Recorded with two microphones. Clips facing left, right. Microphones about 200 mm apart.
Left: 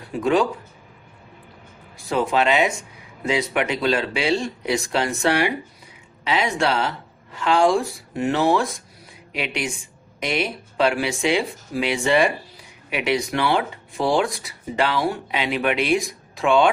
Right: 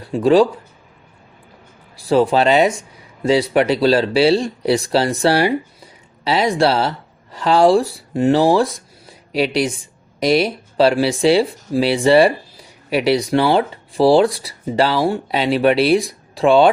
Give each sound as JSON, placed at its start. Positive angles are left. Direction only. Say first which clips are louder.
{"t": 0.1, "sound": "speech", "louder": "right 7 dB", "side_deg": -30}
{"t": 2.0, "sound": "speech", "louder": "right 7 dB", "side_deg": -35}